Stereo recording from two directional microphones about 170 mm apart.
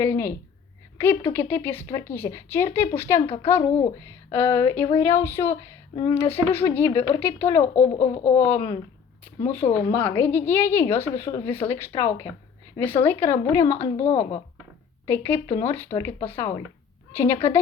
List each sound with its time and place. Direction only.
0.0 s speech: 15° left (ahead or behind)
7.8 s speech: 40° left (ahead or behind)
8.4 s speech: 20° left (ahead or behind)
14.0 s speech: 40° left (ahead or behind)
15.0 s speech: 15° left (ahead or behind)
17.1 s speech: 15° left (ahead or behind)